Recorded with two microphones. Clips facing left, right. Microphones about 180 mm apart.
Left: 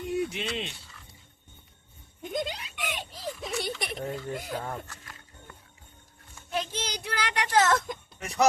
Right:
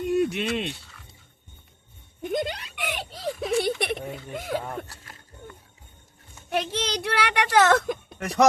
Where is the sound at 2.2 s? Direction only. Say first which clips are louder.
Right 5 dB; 60° right (ahead or behind).